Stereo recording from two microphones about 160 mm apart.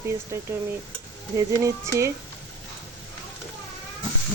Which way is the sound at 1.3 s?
20° right (ahead or behind).